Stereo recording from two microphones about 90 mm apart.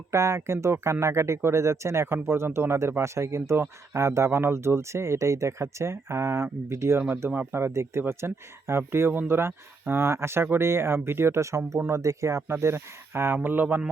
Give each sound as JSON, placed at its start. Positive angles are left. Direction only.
{"t": 0.1, "sound": "speech", "side_deg": -30}